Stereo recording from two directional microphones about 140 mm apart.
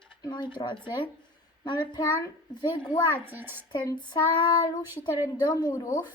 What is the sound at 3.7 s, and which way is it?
Speech, 35° left (ahead or behind).